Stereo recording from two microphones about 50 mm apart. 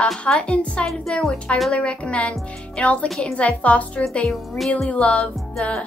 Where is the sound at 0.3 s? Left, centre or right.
Left.